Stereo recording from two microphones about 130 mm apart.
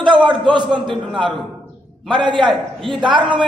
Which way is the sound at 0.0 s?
35° right (ahead or behind).